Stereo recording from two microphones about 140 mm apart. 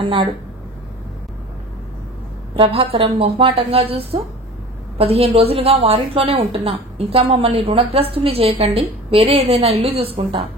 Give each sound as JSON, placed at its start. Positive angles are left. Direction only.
{"t": 0.0, "sound": "speech", "side_deg": -35}
{"t": 2.5, "sound": "a woman's voice", "side_deg": -40}